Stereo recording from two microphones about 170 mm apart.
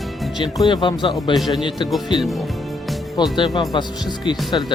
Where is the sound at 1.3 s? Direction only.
Centre (ahead or behind).